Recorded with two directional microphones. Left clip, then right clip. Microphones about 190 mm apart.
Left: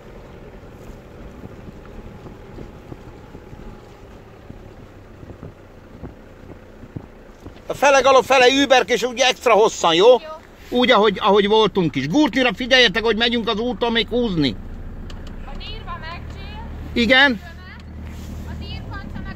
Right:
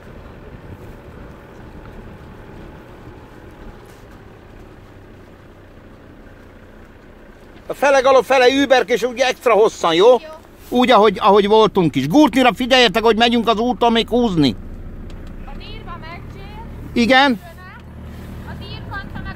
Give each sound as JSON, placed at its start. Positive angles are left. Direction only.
{"t": 7.6, "sound": "speech", "side_deg": -5}
{"t": 15.6, "sound": "vehicle", "side_deg": 5}
{"t": 16.9, "sound": "speech", "side_deg": -20}
{"t": 18.6, "sound": "vehicle", "side_deg": 15}